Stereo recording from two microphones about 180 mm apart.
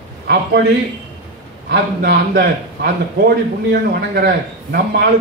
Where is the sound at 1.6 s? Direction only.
70° right (ahead or behind).